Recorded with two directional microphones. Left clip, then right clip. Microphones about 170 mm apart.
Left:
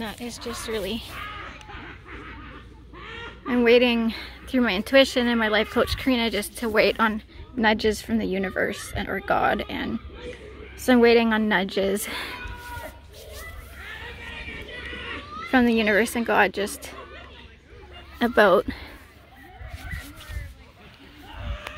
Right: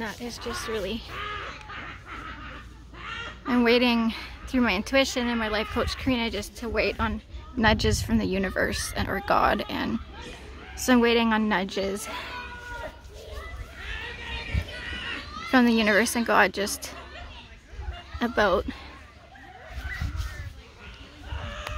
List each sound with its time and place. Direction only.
0.0 s a woman's voice: 25° left (ahead or behind)
3.4 s speech: centre (ahead or behind)
4.9 s a woman's voice: 20° left (ahead or behind); by 7.2 s 40° left (ahead or behind)
7.5 s speech: centre (ahead or behind)
10.9 s a woman's voice: 10° left (ahead or behind)
11.9 s a woman's voice: 35° left (ahead or behind)
15.5 s speech: centre (ahead or behind)
18.2 s a woman's voice: 20° left (ahead or behind)